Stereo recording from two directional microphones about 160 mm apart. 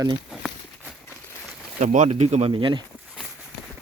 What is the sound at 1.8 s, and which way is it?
Speech, 50° right (ahead or behind).